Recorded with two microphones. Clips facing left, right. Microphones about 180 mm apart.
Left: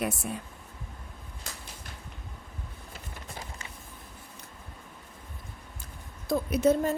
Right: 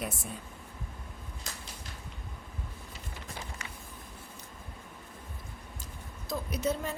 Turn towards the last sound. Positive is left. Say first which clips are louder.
# left 8 dB
turn(degrees=50)  # may be behind; listen again after turning